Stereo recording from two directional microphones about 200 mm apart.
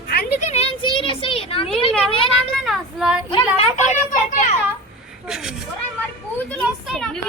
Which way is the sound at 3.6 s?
40° left (ahead or behind).